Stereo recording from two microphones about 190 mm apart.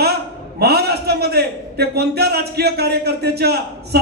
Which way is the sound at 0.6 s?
55° right (ahead or behind).